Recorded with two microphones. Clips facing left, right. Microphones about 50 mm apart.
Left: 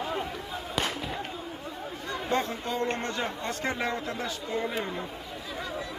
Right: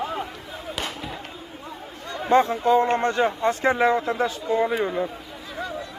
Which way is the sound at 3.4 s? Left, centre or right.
Right.